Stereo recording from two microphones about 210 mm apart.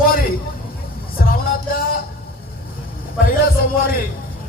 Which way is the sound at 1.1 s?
45° left (ahead or behind).